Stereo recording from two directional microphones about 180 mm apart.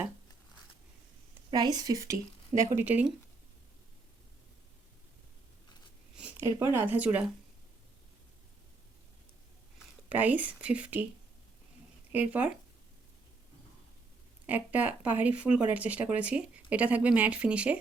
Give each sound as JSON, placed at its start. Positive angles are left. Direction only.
{"t": 1.5, "sound": "speech", "side_deg": -25}
{"t": 6.1, "sound": "a sound", "side_deg": -10}
{"t": 6.7, "sound": "speech", "side_deg": -10}
{"t": 10.1, "sound": "speech", "side_deg": -10}
{"t": 12.1, "sound": "speech", "side_deg": -10}
{"t": 14.4, "sound": "speech", "side_deg": -10}